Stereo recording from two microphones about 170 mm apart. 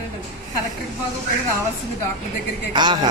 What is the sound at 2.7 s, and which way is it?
Speech, 25° right (ahead or behind).